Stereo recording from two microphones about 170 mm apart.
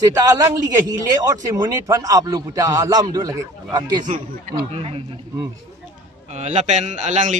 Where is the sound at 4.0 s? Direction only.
50° right (ahead or behind).